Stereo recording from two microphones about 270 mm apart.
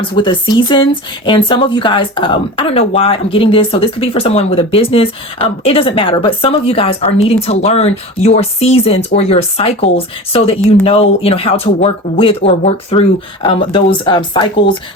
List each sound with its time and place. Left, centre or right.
0.0 s speech: centre